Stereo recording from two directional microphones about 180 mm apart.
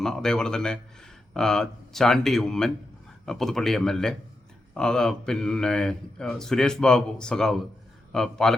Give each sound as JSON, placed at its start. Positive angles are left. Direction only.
{"t": 0.0, "sound": "speech", "side_deg": 5}